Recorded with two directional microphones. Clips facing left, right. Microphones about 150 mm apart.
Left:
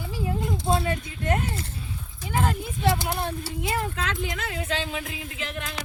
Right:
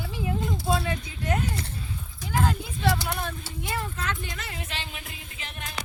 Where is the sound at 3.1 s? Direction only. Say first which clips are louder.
Left 3 dB; 30° left (ahead or behind).